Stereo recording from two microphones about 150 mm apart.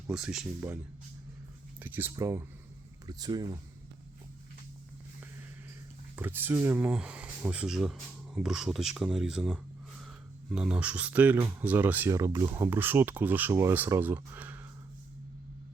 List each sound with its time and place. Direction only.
0.1 s speech: 5° right (ahead or behind)
1.8 s speech: 15° right (ahead or behind)
6.1 s speech: 15° right (ahead or behind)